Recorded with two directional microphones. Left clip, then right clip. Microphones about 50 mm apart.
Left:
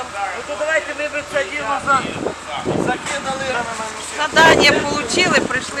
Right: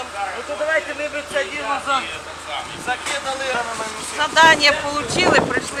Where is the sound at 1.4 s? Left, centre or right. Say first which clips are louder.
Left 2 dB; right.